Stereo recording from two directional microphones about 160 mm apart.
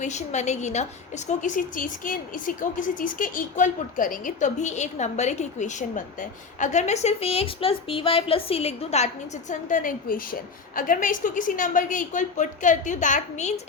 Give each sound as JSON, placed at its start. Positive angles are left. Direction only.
{"t": 0.0, "sound": "a woman's voice", "side_deg": 45}